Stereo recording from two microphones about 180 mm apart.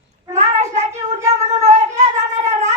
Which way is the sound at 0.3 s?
40° right (ahead or behind).